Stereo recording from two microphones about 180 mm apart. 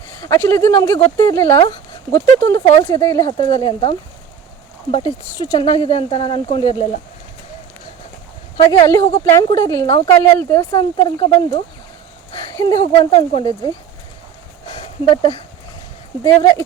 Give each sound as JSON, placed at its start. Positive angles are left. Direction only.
{"t": 0.2, "sound": "speech", "side_deg": 15}
{"t": 8.5, "sound": "speech", "side_deg": 30}
{"t": 9.1, "sound": "speech", "side_deg": 20}
{"t": 12.6, "sound": "speech", "side_deg": 30}
{"t": 14.7, "sound": "a sound", "side_deg": 25}
{"t": 16.2, "sound": "speech", "side_deg": 15}